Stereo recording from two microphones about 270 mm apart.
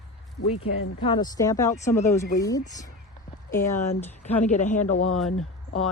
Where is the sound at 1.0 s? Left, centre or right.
Centre.